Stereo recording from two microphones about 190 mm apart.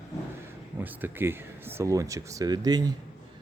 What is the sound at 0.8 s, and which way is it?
Speech, 10° right (ahead or behind).